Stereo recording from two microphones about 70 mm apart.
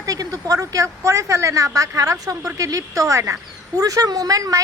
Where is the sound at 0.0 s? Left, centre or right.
Right.